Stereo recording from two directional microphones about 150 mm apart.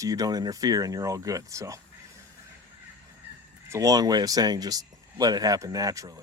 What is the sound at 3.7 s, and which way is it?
Speech, 25° right (ahead or behind).